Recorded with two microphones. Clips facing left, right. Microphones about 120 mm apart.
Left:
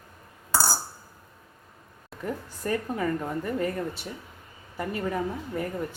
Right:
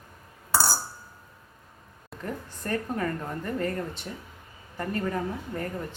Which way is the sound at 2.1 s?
10° left (ahead or behind).